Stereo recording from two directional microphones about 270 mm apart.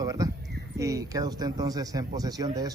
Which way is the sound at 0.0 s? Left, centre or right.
Centre.